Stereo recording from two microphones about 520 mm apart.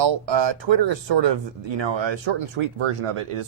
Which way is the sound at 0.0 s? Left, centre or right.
Right.